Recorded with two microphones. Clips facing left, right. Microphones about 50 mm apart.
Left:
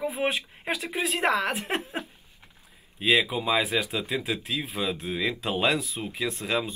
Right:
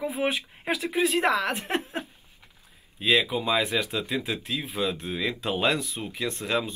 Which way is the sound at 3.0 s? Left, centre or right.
Centre.